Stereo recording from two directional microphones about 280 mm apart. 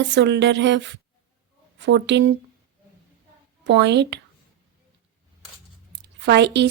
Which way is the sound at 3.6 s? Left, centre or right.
Right.